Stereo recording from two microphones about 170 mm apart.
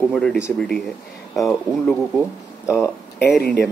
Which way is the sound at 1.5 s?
5° left (ahead or behind).